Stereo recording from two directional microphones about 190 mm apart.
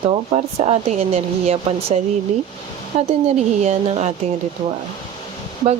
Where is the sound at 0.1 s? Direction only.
35° right (ahead or behind).